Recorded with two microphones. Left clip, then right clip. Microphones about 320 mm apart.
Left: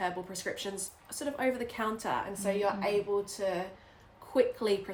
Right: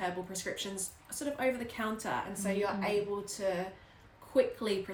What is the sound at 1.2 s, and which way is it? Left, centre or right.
A woman's voice, centre.